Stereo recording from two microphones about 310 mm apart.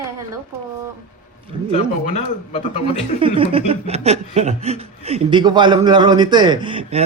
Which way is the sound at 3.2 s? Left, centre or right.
Centre.